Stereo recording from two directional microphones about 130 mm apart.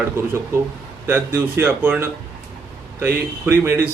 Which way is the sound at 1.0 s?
20° right (ahead or behind).